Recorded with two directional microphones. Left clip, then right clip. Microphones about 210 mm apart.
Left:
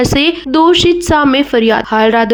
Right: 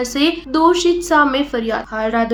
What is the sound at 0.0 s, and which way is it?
Speech, 45° left (ahead or behind).